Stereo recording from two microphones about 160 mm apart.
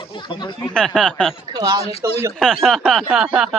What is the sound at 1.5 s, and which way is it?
Speech, 25° right (ahead or behind).